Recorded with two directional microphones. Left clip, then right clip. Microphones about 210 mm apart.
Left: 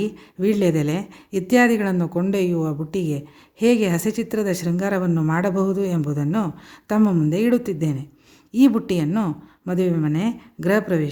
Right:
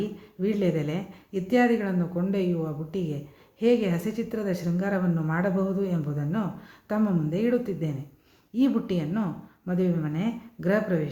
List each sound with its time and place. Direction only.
0.0 s speech: 55° left (ahead or behind)